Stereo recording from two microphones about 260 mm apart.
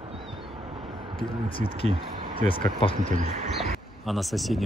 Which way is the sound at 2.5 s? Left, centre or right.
Left.